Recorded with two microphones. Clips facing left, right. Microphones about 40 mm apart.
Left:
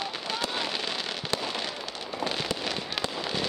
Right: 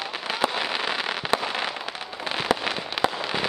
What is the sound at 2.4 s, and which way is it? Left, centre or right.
Fireworks, right.